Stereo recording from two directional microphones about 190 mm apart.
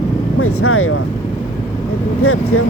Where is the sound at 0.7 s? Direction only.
90° left.